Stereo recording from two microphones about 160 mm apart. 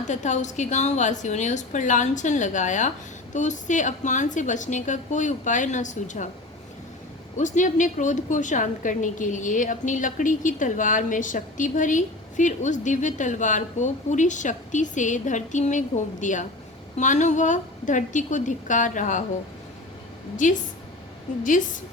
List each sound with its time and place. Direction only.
0.1 s a woman's voice: 50° left (ahead or behind)
7.3 s a woman's voice: 50° left (ahead or behind)
20.3 s a woman's voice: 50° left (ahead or behind)